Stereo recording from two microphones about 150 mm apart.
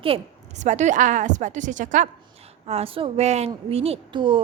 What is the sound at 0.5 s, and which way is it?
A woman's voice, 50° right (ahead or behind).